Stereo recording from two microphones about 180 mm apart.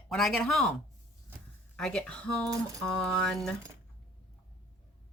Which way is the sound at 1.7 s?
5° left (ahead or behind).